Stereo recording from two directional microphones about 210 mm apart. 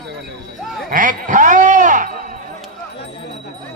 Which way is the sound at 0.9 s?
40° right (ahead or behind).